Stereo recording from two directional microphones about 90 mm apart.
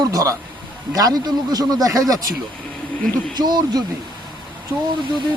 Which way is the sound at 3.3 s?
50° right (ahead or behind).